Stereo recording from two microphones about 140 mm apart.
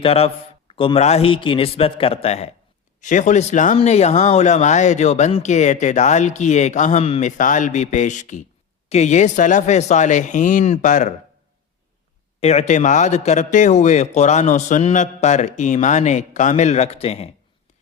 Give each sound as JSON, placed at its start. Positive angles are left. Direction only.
{"t": 0.0, "sound": "a man's voice", "side_deg": 45}
{"t": 3.0, "sound": "a man's voice", "side_deg": 60}
{"t": 3.8, "sound": "a man's voice", "side_deg": 50}
{"t": 12.4, "sound": "a man's voice", "side_deg": 50}